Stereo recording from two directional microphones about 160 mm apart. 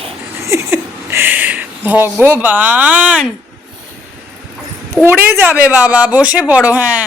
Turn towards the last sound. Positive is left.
turn(degrees=-10)  # may be behind; listen again after turning